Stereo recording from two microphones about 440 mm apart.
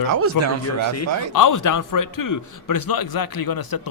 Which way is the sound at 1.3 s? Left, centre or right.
Left.